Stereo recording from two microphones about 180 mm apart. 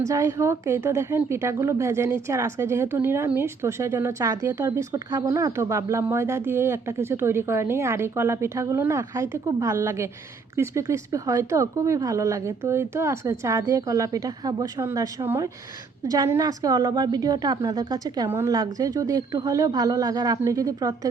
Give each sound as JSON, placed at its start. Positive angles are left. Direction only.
{"t": 0.0, "sound": "a woman's voice", "side_deg": -15}